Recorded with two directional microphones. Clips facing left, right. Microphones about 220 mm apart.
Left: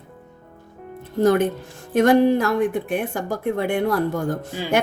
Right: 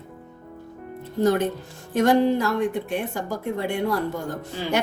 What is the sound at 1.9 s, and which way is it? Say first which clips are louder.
A woman's voice: left 3 dB; 55° left (ahead or behind).